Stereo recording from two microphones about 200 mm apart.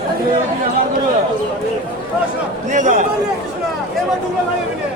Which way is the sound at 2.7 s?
40° right (ahead or behind).